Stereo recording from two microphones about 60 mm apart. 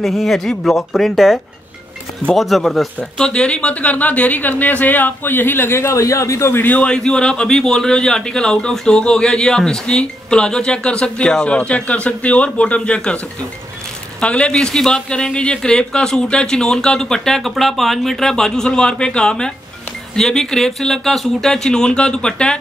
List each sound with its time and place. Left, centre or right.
0.0 s speech: centre
3.0 s speech: centre; by 6.5 s left
6.5 s a man's voice: left
6.8 s a man's voice: centre
14.2 s a man's voice: centre